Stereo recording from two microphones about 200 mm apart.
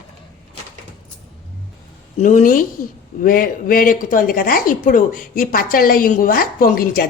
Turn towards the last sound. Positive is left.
turn(degrees=45)  # may be behind; listen again after turning